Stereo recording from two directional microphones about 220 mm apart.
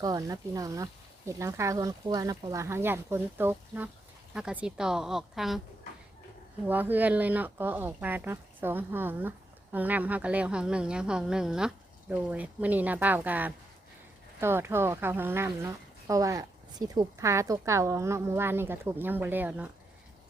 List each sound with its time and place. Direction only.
0.0 s a woman's voice: 15° right (ahead or behind)
6.7 s speech: 10° right (ahead or behind)